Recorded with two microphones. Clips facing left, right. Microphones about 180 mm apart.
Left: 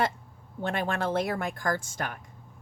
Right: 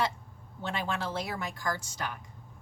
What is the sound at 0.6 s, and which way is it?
A woman's voice, 55° left (ahead or behind).